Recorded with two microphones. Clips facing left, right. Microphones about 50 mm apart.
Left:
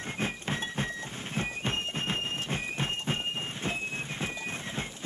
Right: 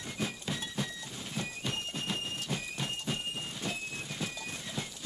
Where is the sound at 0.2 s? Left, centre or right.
Left.